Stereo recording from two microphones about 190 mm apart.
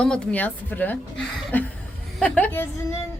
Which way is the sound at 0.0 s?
5° left (ahead or behind).